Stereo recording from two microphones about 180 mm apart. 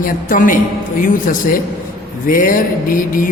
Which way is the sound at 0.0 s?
50° left (ahead or behind).